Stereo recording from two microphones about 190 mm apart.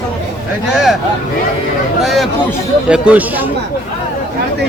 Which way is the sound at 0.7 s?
Centre (ahead or behind).